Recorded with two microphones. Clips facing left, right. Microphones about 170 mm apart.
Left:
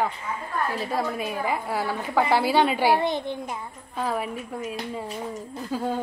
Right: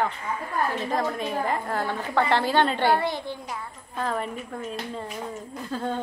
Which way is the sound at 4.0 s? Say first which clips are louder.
Left 1 dB; 5° left (ahead or behind).